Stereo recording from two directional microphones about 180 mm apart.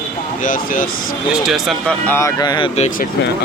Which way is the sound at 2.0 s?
15° left (ahead or behind).